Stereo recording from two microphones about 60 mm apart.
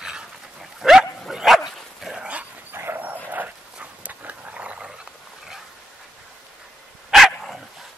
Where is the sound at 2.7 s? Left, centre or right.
Right; by 4.9 s centre.